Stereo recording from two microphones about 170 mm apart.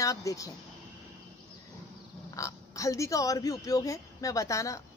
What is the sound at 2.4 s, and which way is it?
A woman's voice, 20° left (ahead or behind).